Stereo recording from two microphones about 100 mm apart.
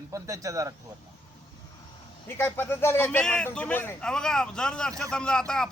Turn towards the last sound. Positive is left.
turn(degrees=5)  # may be behind; listen again after turning